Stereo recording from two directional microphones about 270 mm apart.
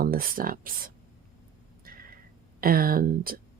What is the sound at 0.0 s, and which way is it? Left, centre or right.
Speech, right.